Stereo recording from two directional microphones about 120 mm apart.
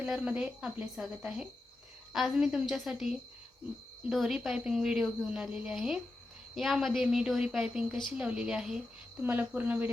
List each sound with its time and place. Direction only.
0.1 s a woman's voice: 10° right (ahead or behind)